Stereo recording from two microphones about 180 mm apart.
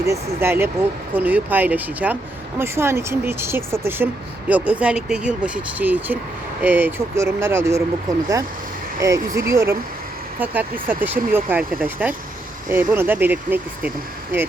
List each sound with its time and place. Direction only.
0.0 s speech: 15° right (ahead or behind)